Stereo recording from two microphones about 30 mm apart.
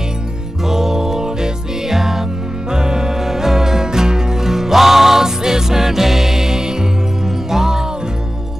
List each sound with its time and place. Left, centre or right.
0.7 s music: centre